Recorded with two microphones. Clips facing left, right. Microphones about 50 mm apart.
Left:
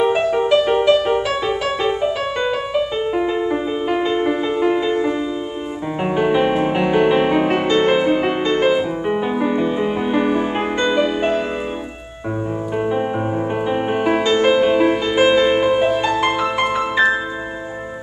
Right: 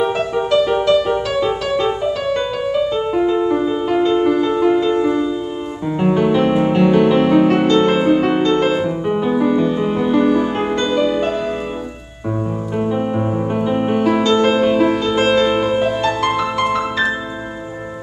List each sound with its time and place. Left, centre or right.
0.0 s music: centre
0.6 s music: left
12.7 s music: centre